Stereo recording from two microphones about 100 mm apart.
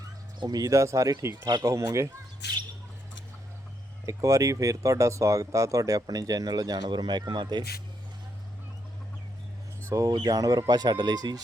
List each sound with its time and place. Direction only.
0.3 s speech: 40° right (ahead or behind)
1.5 s speech: 45° right (ahead or behind)
1.7 s speech: 30° right (ahead or behind)
4.0 s speech: 30° right (ahead or behind); by 7.6 s 50° right (ahead or behind)
9.8 s speech: 30° right (ahead or behind)
10.1 s speech: 40° right (ahead or behind)